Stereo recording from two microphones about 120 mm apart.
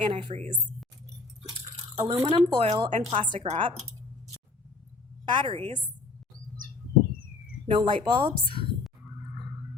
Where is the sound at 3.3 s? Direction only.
55° right (ahead or behind).